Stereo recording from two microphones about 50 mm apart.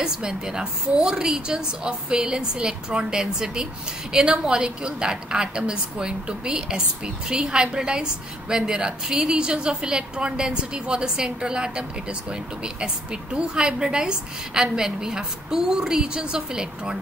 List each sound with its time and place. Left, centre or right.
0.0 s a woman's voice: centre